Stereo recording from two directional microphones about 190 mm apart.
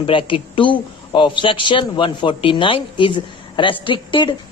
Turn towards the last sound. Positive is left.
turn(degrees=25)  # may be behind; listen again after turning